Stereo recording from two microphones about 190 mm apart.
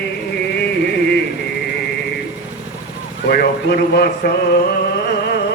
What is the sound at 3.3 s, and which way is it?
Speech, 55° left (ahead or behind).